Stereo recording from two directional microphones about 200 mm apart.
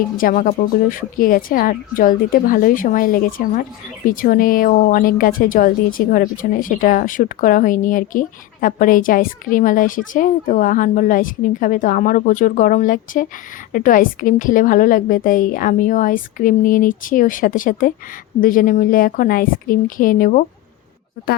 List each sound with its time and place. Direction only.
0.2 s a woman's voice: 45° left (ahead or behind)